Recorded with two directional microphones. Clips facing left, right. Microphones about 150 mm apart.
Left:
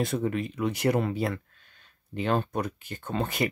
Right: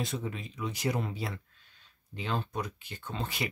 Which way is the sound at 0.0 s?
55° left (ahead or behind).